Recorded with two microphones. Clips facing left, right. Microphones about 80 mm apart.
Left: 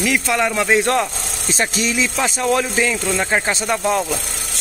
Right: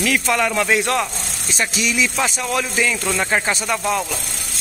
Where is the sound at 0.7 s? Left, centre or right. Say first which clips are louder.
Left 3 dB; left.